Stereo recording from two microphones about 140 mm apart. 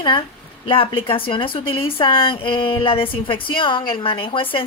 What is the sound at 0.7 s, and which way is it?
Speech, 40° left (ahead or behind).